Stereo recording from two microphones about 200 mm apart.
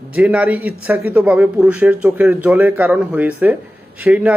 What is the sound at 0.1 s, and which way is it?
A man's voice, 5° right (ahead or behind).